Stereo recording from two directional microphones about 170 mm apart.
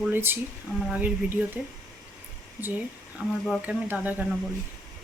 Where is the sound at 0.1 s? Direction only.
10° right (ahead or behind).